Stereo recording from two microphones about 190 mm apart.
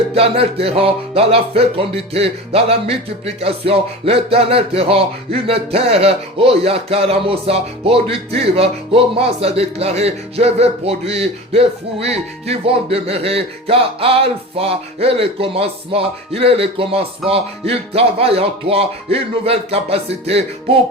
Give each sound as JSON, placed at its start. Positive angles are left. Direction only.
{"t": 0.1, "sound": "speech", "side_deg": -30}